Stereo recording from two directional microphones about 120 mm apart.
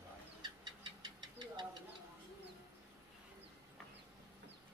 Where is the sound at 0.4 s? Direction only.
40° right (ahead or behind).